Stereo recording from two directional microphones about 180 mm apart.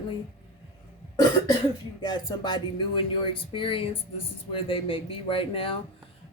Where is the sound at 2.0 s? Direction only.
25° left (ahead or behind).